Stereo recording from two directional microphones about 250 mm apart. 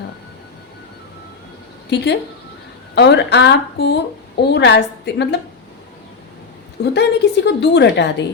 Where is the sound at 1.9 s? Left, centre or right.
Left.